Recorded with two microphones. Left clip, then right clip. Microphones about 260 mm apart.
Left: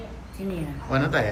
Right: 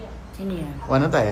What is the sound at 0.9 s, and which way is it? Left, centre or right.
Speech, centre.